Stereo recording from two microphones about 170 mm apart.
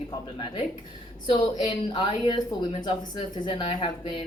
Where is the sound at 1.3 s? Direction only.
30° left (ahead or behind).